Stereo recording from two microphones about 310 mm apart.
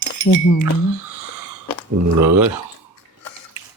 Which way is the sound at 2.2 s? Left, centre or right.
Right.